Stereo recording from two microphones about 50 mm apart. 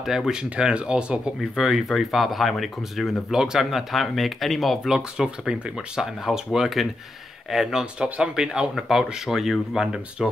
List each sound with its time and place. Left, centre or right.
0.0 s speech: centre
1.6 s speech: centre
3.3 s speech: centre
4.8 s speech: centre